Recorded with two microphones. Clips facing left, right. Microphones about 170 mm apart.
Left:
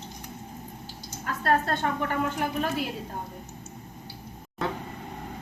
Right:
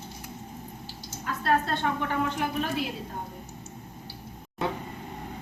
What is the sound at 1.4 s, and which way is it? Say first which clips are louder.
A woman's voice: left 1 dB; 45° left (ahead or behind).